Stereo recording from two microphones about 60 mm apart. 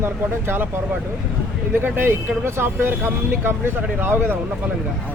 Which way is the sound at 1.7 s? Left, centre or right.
Right.